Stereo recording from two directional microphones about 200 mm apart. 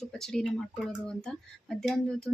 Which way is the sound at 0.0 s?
Centre (ahead or behind).